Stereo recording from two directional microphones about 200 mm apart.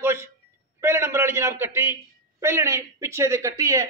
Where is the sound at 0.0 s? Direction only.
15° right (ahead or behind).